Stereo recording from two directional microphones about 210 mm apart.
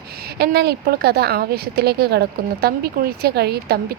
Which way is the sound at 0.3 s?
50° right (ahead or behind).